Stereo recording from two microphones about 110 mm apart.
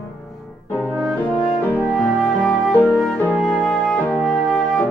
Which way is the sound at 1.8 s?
10° left (ahead or behind).